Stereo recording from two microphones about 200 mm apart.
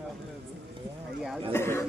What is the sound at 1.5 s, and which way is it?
Speech, 10° left (ahead or behind).